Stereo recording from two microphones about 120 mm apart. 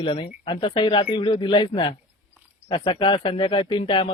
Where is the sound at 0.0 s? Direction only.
45° left (ahead or behind).